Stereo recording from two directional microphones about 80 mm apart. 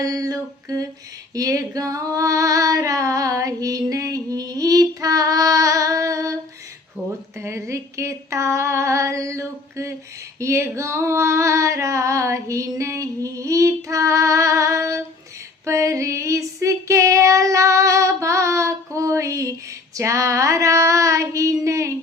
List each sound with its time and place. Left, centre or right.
0.0 s female singing: right